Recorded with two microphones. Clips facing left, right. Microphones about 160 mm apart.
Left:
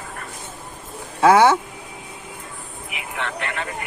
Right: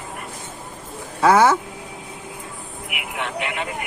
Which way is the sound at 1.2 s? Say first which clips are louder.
Left 1 dB; 25° left (ahead or behind).